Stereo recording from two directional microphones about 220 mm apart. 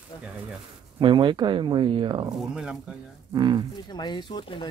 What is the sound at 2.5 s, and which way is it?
Speech, 5° right (ahead or behind).